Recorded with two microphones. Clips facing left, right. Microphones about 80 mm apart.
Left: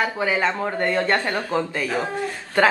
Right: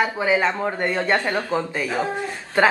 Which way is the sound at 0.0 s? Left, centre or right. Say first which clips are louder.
Right 2 dB; centre.